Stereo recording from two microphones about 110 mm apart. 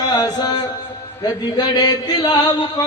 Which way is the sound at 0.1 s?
35° left (ahead or behind).